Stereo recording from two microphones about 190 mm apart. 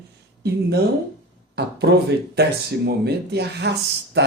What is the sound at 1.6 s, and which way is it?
Speech, 60° right (ahead or behind).